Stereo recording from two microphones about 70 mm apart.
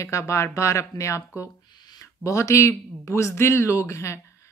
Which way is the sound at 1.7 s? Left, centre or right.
Left.